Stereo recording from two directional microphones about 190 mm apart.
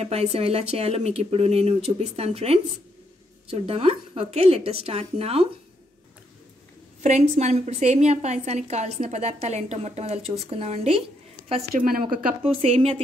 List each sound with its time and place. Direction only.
0.0 s a woman's voice: 35° right (ahead or behind)
7.0 s a woman's voice: 35° right (ahead or behind)
11.7 s a woman's voice: 50° right (ahead or behind)
12.4 s a woman's voice: 30° right (ahead or behind)